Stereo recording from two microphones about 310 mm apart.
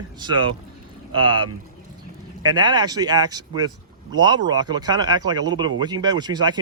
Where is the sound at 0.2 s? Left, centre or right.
Centre.